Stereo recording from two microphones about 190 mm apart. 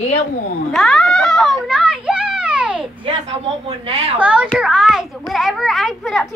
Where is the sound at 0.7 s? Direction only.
Centre (ahead or behind).